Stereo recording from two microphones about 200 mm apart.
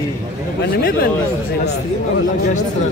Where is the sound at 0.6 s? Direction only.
50° left (ahead or behind).